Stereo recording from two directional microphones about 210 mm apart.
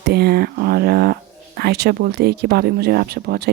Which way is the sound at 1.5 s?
50° right (ahead or behind).